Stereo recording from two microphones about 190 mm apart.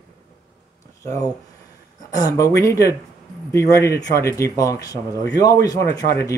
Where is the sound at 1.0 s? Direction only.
15° left (ahead or behind).